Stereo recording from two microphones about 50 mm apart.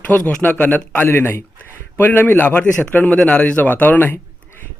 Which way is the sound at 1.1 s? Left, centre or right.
Left.